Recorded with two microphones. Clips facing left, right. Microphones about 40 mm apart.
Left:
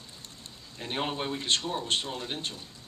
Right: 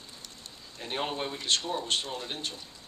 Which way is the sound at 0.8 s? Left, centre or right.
Centre.